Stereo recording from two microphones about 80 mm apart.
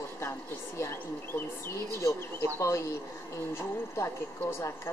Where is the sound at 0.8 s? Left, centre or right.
Left.